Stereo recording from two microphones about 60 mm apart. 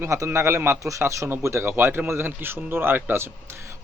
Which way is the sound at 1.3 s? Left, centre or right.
Right.